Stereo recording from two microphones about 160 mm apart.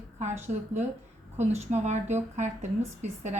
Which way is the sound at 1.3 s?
45° right (ahead or behind).